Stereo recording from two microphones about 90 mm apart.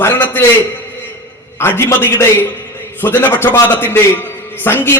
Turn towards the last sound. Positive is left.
turn(degrees=25)  # may be behind; listen again after turning